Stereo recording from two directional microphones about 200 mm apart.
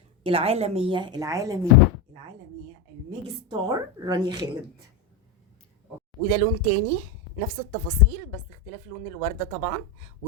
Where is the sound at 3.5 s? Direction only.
20° right (ahead or behind).